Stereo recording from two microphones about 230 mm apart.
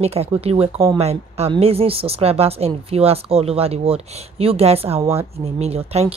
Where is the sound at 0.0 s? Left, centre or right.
Right.